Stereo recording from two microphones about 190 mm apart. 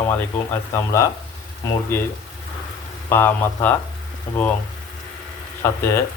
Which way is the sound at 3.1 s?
10° left (ahead or behind).